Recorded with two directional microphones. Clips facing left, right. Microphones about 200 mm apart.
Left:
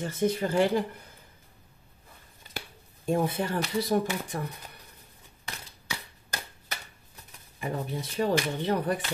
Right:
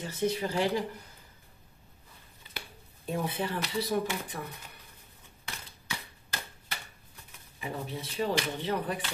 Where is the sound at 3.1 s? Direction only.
45° left (ahead or behind).